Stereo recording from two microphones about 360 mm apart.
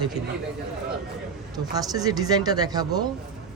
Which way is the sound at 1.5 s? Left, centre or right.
Centre.